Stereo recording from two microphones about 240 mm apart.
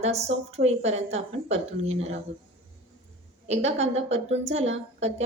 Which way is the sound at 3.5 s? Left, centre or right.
Right.